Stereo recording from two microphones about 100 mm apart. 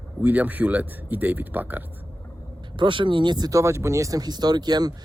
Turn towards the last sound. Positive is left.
turn(degrees=-40)  # may be behind; listen again after turning